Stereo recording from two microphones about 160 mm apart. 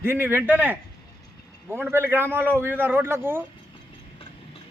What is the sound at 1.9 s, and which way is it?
Speech, 15° right (ahead or behind).